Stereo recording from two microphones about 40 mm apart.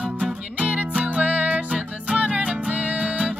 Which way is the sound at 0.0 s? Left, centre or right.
Right.